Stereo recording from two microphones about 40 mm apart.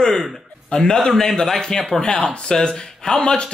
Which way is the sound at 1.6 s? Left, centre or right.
Centre.